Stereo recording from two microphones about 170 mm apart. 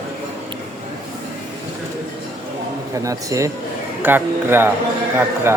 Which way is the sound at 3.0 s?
20° right (ahead or behind).